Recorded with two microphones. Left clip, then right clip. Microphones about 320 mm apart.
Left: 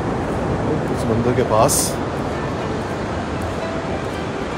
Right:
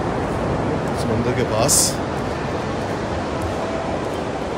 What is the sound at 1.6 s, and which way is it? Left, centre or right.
Speech, centre.